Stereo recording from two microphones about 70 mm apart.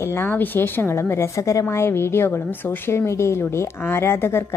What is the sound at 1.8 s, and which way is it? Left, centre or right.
A woman's voice, left.